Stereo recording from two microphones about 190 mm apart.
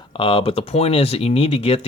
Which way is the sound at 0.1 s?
30° left (ahead or behind).